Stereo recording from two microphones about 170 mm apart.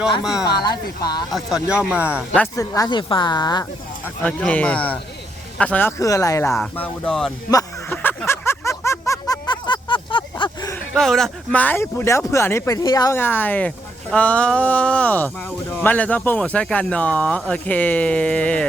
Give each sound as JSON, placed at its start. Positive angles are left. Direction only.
{"t": 1.3, "sound": "speech", "side_deg": -5}
{"t": 2.6, "sound": "speech", "side_deg": 20}
{"t": 4.2, "sound": "speech", "side_deg": 5}
{"t": 7.5, "sound": "a sound", "side_deg": 10}
{"t": 10.8, "sound": "speech", "side_deg": 0}